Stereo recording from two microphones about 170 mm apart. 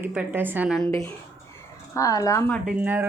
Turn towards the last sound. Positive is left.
turn(degrees=-10)  # may be behind; listen again after turning